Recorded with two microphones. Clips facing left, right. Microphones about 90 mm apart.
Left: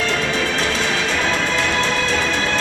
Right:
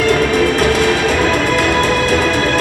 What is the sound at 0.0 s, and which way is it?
Music, 55° right (ahead or behind).